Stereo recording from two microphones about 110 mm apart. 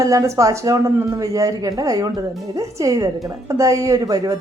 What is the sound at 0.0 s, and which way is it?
A woman's voice, 30° right (ahead or behind).